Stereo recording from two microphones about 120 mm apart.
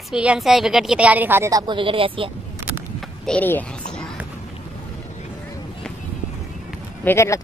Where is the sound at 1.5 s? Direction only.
35° right (ahead or behind).